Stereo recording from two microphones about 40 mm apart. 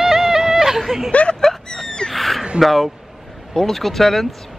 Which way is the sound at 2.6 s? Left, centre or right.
Centre.